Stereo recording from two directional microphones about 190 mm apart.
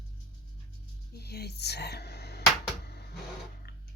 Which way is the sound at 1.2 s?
55° left (ahead or behind).